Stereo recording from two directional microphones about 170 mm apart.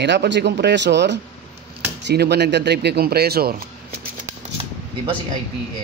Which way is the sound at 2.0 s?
75° right (ahead or behind).